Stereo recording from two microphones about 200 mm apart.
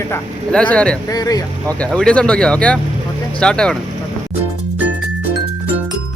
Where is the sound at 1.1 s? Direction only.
20° left (ahead or behind).